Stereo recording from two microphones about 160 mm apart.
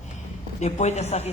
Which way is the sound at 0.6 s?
45° left (ahead or behind).